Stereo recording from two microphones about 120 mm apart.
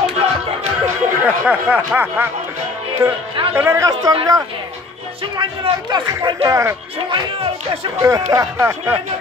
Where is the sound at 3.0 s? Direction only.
30° right (ahead or behind).